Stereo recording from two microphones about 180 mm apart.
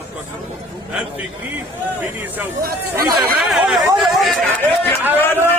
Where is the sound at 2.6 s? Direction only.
55° right (ahead or behind).